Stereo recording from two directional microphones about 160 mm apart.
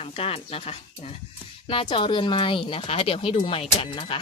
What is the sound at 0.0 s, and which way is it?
Speech, 35° left (ahead or behind).